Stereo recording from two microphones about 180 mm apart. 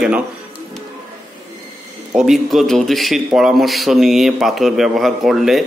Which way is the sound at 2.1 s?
Centre (ahead or behind).